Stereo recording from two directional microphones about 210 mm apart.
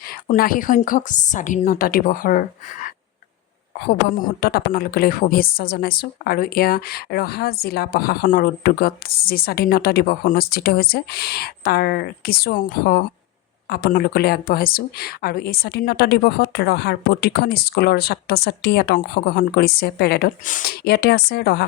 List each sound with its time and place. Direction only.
0.1 s a woman's voice: 45° left (ahead or behind)